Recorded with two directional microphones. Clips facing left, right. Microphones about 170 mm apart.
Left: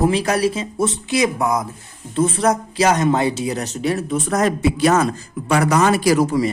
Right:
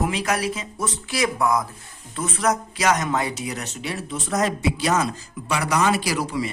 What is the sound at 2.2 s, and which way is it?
A man's voice, 30° left (ahead or behind).